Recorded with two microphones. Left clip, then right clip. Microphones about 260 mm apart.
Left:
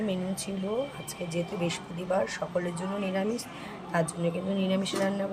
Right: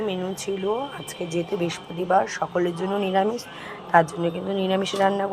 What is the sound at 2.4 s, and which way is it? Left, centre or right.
Speech, right.